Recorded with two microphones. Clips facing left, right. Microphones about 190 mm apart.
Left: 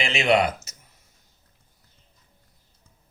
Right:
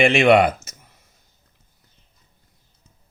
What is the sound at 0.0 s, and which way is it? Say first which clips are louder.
Speech: right 7 dB; 55° right (ahead or behind).